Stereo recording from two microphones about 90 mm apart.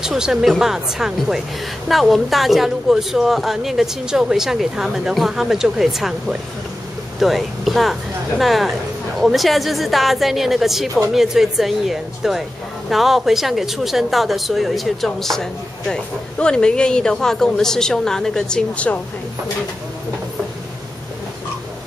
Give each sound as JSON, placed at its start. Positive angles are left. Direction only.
{"t": 0.0, "sound": "a woman's voice", "side_deg": -5}